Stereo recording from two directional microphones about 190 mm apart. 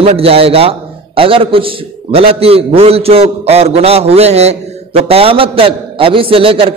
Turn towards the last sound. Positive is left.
turn(degrees=-30)  # may be behind; listen again after turning